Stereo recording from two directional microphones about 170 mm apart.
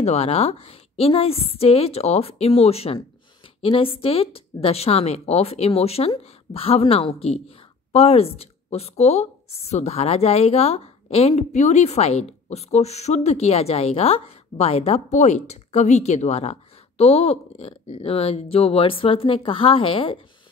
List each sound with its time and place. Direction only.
0.0 s speech: 40° left (ahead or behind)